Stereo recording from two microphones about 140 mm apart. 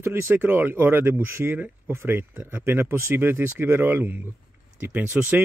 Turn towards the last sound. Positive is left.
turn(degrees=-10)  # may be behind; listen again after turning